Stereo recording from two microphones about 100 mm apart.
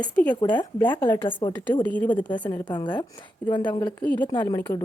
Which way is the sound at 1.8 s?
15° left (ahead or behind).